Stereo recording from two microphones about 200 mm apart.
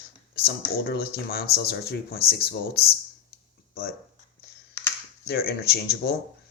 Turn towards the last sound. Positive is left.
turn(degrees=55)  # may be behind; listen again after turning